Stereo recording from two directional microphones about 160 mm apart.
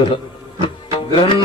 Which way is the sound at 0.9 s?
30° left (ahead or behind).